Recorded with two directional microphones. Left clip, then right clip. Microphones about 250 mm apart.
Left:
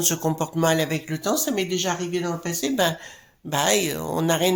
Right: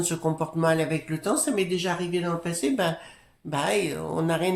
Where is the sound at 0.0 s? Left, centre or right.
Left.